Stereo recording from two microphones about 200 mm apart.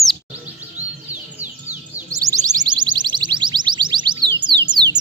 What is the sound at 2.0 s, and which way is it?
Music, 15° right (ahead or behind).